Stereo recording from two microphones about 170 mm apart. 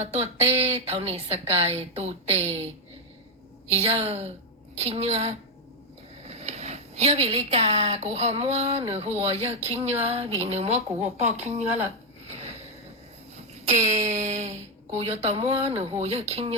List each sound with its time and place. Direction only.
0.0 s a woman's voice: 40° right (ahead or behind)
3.7 s a woman's voice: 35° right (ahead or behind)
14.1 s a woman's voice: 40° right (ahead or behind)